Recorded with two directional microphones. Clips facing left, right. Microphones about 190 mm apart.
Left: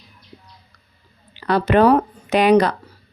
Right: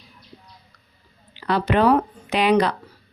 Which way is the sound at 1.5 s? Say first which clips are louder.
Left 4 dB; 45° left (ahead or behind).